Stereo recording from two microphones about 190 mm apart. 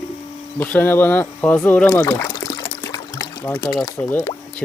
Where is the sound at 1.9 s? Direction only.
15° left (ahead or behind).